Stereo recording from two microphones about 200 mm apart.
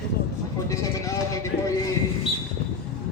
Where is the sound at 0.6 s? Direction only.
15° left (ahead or behind).